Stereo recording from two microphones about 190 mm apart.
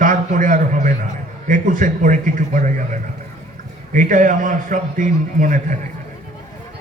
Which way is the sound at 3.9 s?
45° right (ahead or behind).